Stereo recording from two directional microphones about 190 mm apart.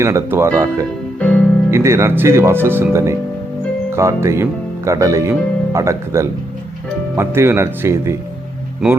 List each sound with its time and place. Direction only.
0.0 s speech: 15° right (ahead or behind)
1.2 s music: 5° left (ahead or behind)
1.7 s speech: 15° right (ahead or behind)